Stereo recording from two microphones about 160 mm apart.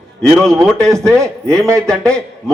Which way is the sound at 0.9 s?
20° right (ahead or behind).